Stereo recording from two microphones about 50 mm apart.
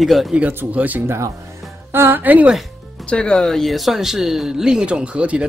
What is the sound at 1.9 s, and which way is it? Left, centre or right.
Speech, right.